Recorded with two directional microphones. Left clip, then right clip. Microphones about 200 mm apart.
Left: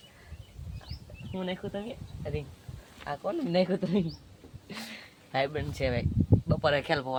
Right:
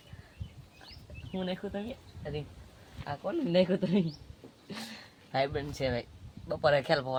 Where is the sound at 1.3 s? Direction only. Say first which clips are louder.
Left 1 dB; 10° right (ahead or behind).